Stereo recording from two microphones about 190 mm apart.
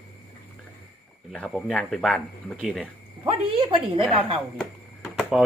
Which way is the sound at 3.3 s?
30° right (ahead or behind).